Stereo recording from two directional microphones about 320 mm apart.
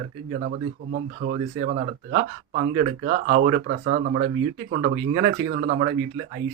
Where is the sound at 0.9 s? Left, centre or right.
Right.